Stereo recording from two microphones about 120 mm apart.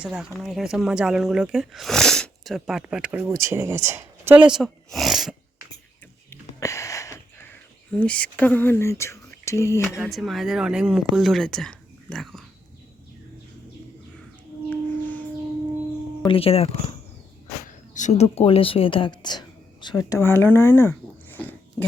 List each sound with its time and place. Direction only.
0.0 s speech: 10° right (ahead or behind)
3.2 s speech: 20° right (ahead or behind)
4.4 s speech: 5° right (ahead or behind)
6.6 s wheeze: 25° left (ahead or behind)
7.9 s speech: 10° left (ahead or behind)
10.0 s speech: centre (ahead or behind)
14.7 s music: 15° left (ahead or behind)
16.2 s speech: 50° left (ahead or behind)
17.9 s a woman's voice: 80° left; by 21.8 s 15° left (ahead or behind)